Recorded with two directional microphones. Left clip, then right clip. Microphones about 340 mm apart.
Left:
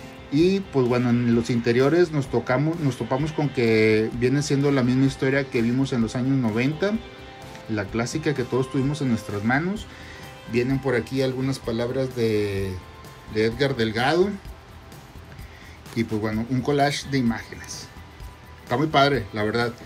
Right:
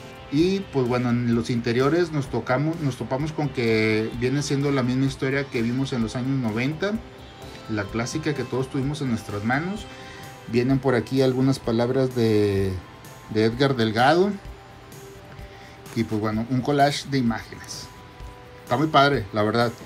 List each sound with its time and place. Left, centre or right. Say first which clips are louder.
0.3 s speech: left 2 dB; centre
16.0 s speech: even; centre